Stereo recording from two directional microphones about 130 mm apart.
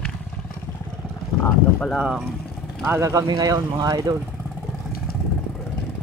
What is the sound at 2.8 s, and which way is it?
Speech, 20° right (ahead or behind).